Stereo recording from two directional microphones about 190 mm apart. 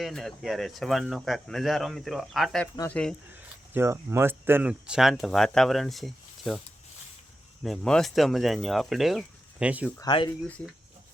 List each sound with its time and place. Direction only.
0.0 s speech: centre (ahead or behind)
3.3 s speech: 10° right (ahead or behind)
7.6 s speech: centre (ahead or behind)
10.0 s speech: 25° left (ahead or behind)